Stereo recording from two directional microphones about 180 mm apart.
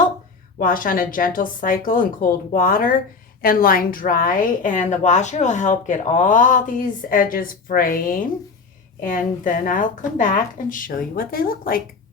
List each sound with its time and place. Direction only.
0.6 s a woman's voice: 50° left (ahead or behind)